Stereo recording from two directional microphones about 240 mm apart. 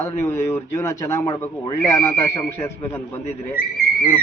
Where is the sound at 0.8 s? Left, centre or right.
Centre.